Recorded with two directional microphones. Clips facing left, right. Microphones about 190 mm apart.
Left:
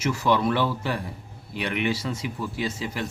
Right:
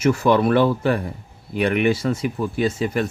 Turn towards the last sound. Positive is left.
turn(degrees=-55)  # may be behind; listen again after turning